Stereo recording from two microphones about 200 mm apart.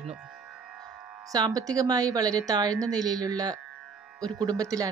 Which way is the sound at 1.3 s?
20° right (ahead or behind).